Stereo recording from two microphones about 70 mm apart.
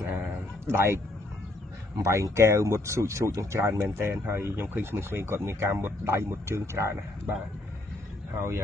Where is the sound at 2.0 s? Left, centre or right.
Right.